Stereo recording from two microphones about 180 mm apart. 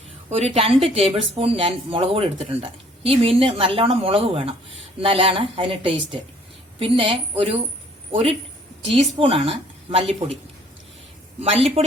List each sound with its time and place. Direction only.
0.3 s a woman's voice: 35° right (ahead or behind)
11.3 s a woman's voice: 35° right (ahead or behind)